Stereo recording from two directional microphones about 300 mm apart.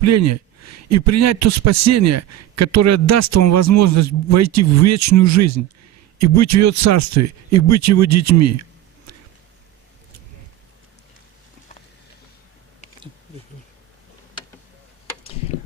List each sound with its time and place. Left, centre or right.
0.0 s a man's voice: right